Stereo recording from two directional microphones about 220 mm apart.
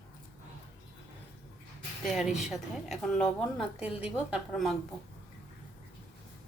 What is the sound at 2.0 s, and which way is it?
Speech, centre (ahead or behind).